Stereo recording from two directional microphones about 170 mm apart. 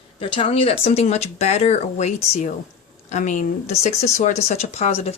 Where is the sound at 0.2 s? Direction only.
30° left (ahead or behind).